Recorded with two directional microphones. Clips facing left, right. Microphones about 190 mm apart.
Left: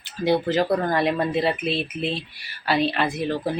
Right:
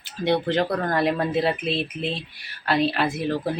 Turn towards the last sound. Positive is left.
turn(degrees=0)  # may be behind; listen again after turning